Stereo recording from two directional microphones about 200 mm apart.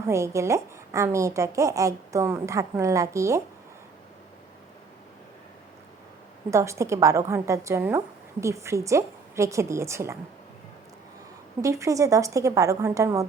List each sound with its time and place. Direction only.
0.1 s a woman's voice: 15° right (ahead or behind)
6.5 s a woman's voice: 15° right (ahead or behind)
11.6 s a woman's voice: 15° right (ahead or behind)